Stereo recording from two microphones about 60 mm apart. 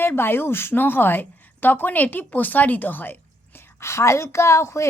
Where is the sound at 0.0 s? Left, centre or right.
Left.